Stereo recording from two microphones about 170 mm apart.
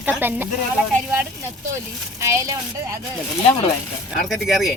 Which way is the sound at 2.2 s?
15° right (ahead or behind).